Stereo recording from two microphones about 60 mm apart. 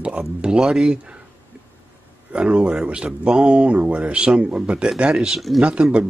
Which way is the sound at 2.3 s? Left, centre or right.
Centre.